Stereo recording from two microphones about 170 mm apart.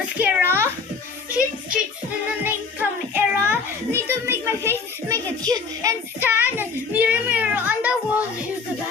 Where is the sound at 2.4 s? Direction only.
10° right (ahead or behind).